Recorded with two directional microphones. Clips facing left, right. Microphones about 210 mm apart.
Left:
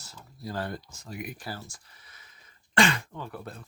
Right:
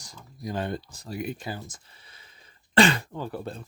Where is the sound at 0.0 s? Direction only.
15° right (ahead or behind).